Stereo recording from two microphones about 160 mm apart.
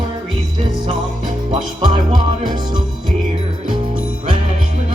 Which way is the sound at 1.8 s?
25° right (ahead or behind).